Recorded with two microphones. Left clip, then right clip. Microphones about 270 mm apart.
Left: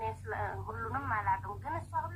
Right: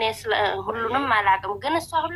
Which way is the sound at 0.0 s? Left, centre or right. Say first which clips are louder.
Right 15 dB; right.